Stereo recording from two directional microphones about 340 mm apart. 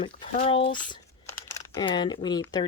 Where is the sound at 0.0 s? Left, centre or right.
Centre.